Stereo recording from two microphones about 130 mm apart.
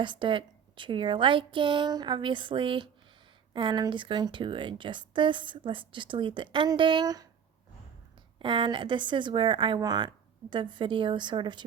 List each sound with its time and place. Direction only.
0.0 s speech: 40° right (ahead or behind)
8.4 s speech: 40° right (ahead or behind)